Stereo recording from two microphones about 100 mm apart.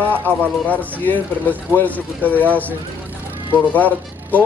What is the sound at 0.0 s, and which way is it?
Speech, 15° left (ahead or behind).